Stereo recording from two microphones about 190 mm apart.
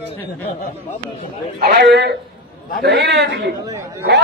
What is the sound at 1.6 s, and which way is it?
A man's voice, 60° right (ahead or behind).